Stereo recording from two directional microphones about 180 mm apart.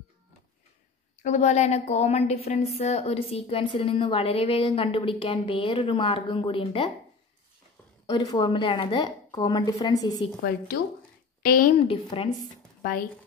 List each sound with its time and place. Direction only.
1.2 s a woman's voice: 40° left (ahead or behind)
8.1 s a woman's voice: 20° left (ahead or behind)
11.4 s a woman's voice: 50° left (ahead or behind)
11.8 s a woman's voice: 30° left (ahead or behind)